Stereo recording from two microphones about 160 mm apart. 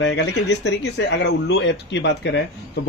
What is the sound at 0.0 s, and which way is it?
Speech, 90° left.